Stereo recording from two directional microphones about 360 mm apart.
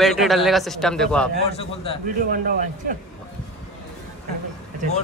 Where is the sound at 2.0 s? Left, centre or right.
Right.